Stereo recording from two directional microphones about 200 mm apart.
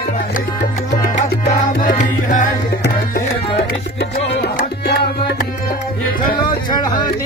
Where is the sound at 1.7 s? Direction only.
45° left (ahead or behind).